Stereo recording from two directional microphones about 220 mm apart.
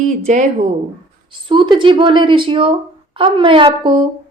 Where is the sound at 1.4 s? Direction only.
20° right (ahead or behind).